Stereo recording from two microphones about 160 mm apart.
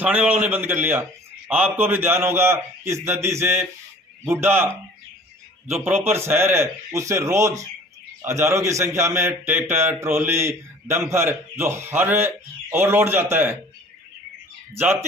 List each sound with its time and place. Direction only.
0.0 s a man's voice: 10° right (ahead or behind)
5.8 s a man's voice: 15° right (ahead or behind)